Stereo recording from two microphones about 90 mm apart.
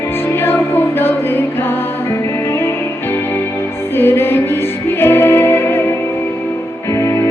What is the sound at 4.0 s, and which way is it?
Music, 25° left (ahead or behind).